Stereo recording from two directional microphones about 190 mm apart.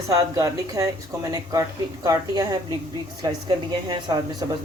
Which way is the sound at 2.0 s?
20° right (ahead or behind).